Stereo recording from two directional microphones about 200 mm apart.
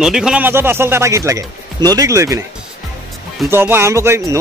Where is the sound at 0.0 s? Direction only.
5° right (ahead or behind).